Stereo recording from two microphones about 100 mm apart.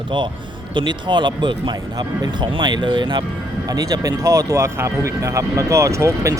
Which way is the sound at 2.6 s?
50° right (ahead or behind).